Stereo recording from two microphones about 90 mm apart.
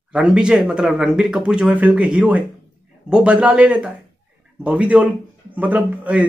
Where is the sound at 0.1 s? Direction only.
10° right (ahead or behind).